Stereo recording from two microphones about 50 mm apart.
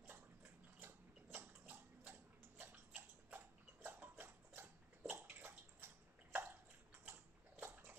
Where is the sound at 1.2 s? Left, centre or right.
Right.